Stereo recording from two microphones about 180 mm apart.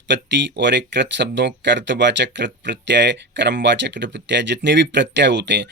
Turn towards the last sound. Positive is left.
turn(degrees=-75)  # may be behind; listen again after turning